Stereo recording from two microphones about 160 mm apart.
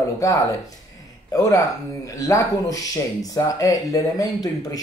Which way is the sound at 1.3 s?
20° left (ahead or behind).